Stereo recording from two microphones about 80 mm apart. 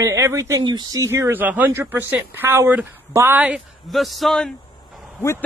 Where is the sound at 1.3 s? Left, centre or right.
Right.